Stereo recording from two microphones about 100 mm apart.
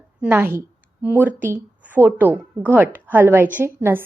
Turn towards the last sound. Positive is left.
turn(degrees=-20)  # may be behind; listen again after turning